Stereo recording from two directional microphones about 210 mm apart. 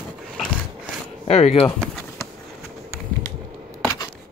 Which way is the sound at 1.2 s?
30° left (ahead or behind).